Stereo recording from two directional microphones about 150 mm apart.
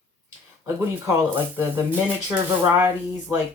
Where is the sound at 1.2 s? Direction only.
20° right (ahead or behind).